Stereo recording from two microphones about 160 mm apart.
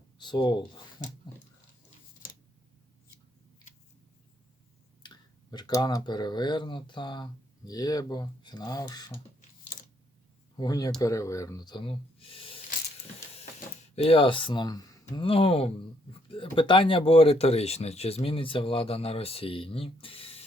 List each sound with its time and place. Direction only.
0.2 s speech: 30° left (ahead or behind)
5.0 s speech: 25° left (ahead or behind)
10.6 s speech: 25° left (ahead or behind)
13.9 s speech: 35° left (ahead or behind)